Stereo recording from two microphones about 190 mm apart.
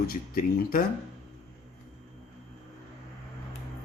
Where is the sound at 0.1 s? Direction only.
50° left (ahead or behind).